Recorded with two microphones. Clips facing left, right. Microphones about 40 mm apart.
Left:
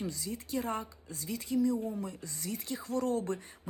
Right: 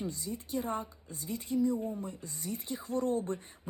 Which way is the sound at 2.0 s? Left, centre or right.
Left.